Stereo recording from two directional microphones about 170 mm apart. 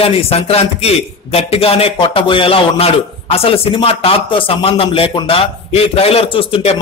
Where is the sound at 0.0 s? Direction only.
35° left (ahead or behind).